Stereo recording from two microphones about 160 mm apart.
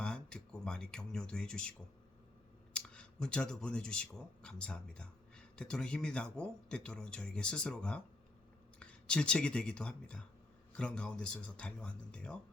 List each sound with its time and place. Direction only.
0.0 s speech: 5° left (ahead or behind)
2.7 s a man's voice: 5° left (ahead or behind)